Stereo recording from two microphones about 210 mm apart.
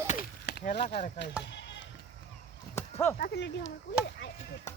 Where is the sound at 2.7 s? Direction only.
10° left (ahead or behind).